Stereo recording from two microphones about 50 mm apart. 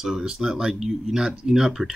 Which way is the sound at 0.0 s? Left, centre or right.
Centre.